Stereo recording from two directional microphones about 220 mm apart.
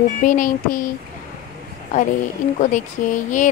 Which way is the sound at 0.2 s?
35° left (ahead or behind).